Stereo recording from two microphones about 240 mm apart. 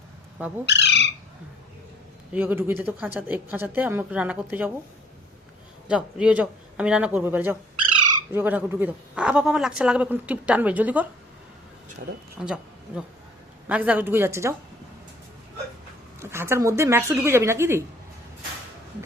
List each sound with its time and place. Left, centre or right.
0.6 s bird: left
2.3 s speech: centre
5.9 s speech: centre
12.4 s speech: centre
13.7 s speech: centre
16.2 s speech: centre